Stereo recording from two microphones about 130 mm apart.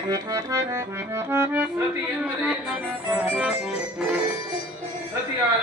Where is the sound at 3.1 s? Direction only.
5° right (ahead or behind).